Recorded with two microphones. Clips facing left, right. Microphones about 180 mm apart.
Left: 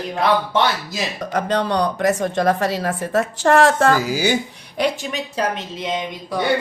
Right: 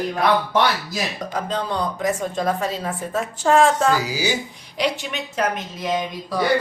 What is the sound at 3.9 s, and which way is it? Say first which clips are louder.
A woman's voice: left 4 dB; 50° left (ahead or behind).